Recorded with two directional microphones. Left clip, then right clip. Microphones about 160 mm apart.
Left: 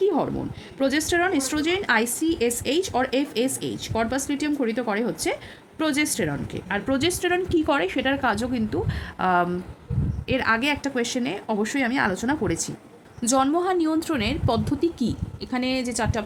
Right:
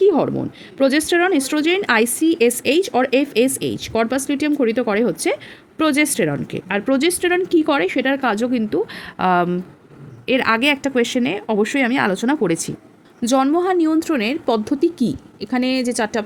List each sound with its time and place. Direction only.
0.0 s speech: 45° right (ahead or behind)
13.2 s speech: 35° right (ahead or behind)